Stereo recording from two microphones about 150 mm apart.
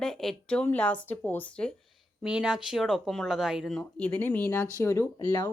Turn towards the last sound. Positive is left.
turn(degrees=25)  # may be behind; listen again after turning